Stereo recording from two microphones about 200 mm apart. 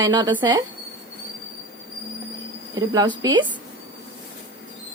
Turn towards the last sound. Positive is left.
turn(degrees=-20)  # may be behind; listen again after turning